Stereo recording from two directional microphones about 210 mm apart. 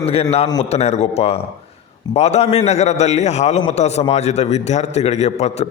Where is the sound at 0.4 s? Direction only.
20° left (ahead or behind).